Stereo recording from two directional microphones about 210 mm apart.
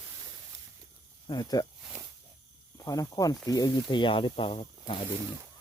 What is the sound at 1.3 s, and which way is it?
Speech, 20° left (ahead or behind).